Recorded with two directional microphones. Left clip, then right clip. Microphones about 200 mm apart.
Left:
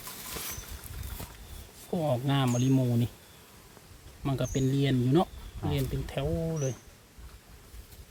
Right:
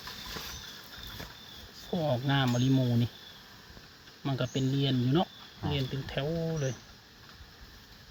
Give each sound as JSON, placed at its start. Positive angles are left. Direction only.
{"t": 1.9, "sound": "speech", "side_deg": 5}
{"t": 4.2, "sound": "speech", "side_deg": 10}